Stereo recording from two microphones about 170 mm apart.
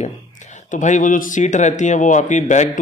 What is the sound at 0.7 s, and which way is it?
Speech, 45° left (ahead or behind).